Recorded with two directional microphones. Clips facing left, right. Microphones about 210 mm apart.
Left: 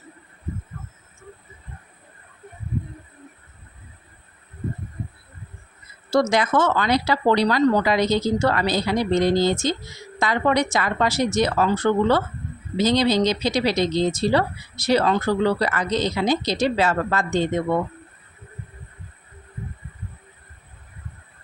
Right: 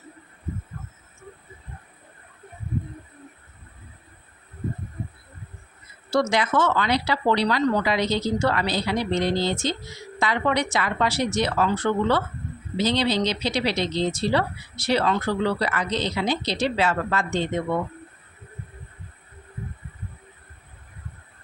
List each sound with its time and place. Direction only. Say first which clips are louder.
6.3 s speech: left 2 dB; 45° left (ahead or behind)